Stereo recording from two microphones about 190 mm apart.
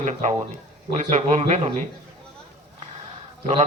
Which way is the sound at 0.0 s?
35° right (ahead or behind).